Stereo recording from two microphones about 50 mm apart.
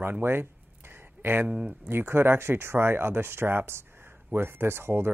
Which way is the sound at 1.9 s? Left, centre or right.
Right.